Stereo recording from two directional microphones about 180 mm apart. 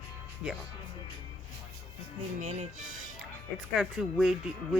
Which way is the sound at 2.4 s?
40° right (ahead or behind).